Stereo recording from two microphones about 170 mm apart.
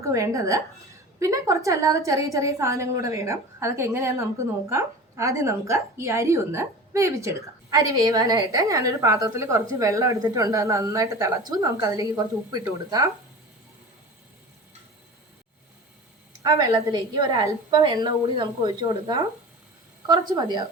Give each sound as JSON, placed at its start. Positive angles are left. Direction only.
{"t": 0.0, "sound": "a woman's voice", "side_deg": -20}
{"t": 16.4, "sound": "a woman's voice", "side_deg": -20}